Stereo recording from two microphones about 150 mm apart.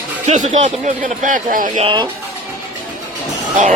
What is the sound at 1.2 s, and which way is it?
Speech, 65° right (ahead or behind).